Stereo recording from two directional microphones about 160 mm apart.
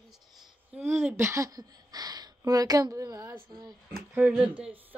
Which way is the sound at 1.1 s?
20° right (ahead or behind).